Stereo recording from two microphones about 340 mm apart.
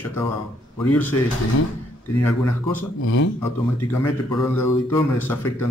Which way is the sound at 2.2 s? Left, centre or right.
Centre.